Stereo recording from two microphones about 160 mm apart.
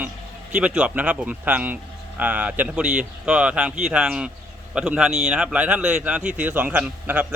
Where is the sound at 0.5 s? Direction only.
5° right (ahead or behind).